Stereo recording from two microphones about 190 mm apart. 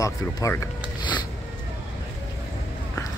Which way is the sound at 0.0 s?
15° left (ahead or behind).